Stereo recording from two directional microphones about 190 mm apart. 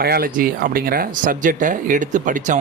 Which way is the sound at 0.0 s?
50° right (ahead or behind).